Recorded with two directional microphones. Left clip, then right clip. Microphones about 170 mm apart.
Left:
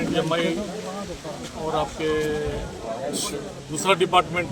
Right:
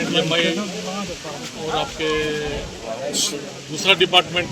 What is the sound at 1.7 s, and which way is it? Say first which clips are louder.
Speech: right 2 dB; 10° left (ahead or behind).